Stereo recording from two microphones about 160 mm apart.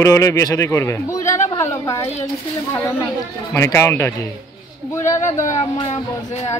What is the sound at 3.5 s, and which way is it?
Speech, 15° left (ahead or behind).